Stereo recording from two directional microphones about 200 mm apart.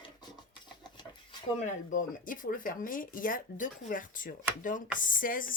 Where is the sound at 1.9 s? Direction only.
45° left (ahead or behind).